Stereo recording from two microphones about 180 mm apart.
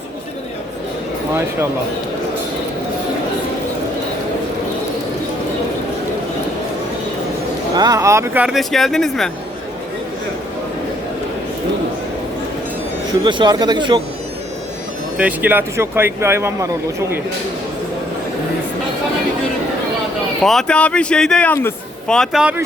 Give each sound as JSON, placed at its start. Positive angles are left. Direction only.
{"t": 7.8, "sound": "a man's voice", "side_deg": -20}
{"t": 13.1, "sound": "speech", "side_deg": -25}
{"t": 15.2, "sound": "speech", "side_deg": -10}
{"t": 20.4, "sound": "a man's voice", "side_deg": 0}